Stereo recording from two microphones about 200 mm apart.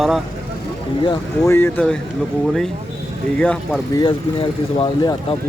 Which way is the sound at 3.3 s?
5° left (ahead or behind).